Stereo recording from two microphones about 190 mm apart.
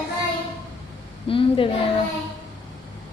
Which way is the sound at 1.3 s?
30° left (ahead or behind).